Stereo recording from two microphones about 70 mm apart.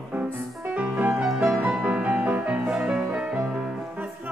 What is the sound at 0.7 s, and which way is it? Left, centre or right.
Music, right.